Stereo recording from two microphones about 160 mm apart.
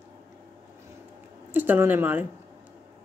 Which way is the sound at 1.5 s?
10° right (ahead or behind).